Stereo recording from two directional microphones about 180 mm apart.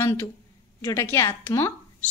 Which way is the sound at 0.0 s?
15° left (ahead or behind).